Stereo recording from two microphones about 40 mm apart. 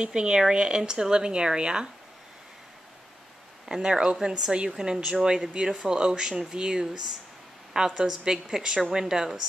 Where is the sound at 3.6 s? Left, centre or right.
Centre.